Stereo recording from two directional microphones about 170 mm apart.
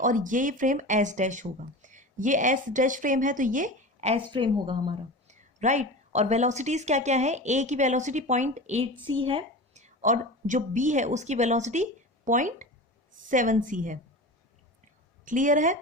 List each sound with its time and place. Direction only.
0.0 s speech: 50° right (ahead or behind)
4.3 s a woman's voice: 30° right (ahead or behind)
5.3 s speech: 45° right (ahead or behind)
15.2 s a woman's voice: 50° right (ahead or behind)